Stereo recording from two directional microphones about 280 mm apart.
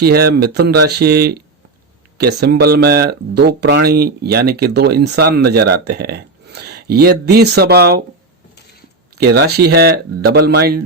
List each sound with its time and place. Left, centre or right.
0.0 s speech: right
9.1 s speech: right